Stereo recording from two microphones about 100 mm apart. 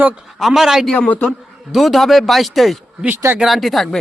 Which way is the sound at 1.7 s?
Centre (ahead or behind).